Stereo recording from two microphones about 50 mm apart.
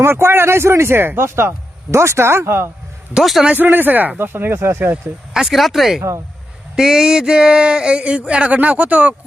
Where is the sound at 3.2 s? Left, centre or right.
Centre.